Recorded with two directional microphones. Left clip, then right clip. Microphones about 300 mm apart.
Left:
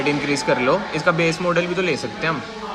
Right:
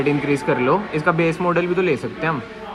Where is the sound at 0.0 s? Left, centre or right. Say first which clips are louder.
Right 1 dB; centre.